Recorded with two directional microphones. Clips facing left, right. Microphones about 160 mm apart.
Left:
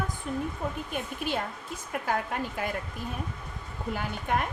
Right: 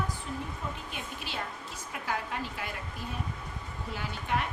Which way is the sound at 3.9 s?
50° left (ahead or behind).